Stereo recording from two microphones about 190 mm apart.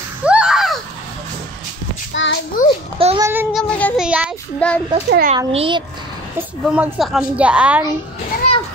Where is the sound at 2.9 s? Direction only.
30° right (ahead or behind).